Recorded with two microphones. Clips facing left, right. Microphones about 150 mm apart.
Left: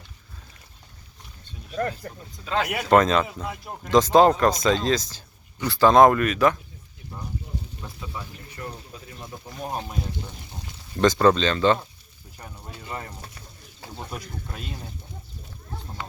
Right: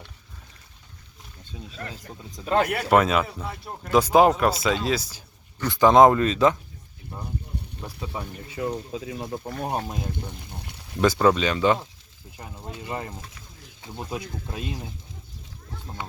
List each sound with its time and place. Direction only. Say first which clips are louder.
2.0 s speech: left 4 dB; 45° left (ahead or behind)
2.4 s speech: right 4 dB; 45° right (ahead or behind)
2.9 s speech: left 2 dB; 5° right (ahead or behind)
3.2 s speech: left 1 dB; 5° left (ahead or behind)
3.8 s speech: left 1 dB; 10° right (ahead or behind)
8.2 s speech: right 7 dB; 90° right
10.9 s speech: left 1 dB; 10° right (ahead or behind)
12.6 s speech: right 4 dB; 25° right (ahead or behind)
14.1 s speech: right 3 dB; 25° right (ahead or behind)